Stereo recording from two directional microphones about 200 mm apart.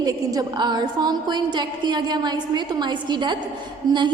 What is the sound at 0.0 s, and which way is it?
A woman's voice, 20° right (ahead or behind).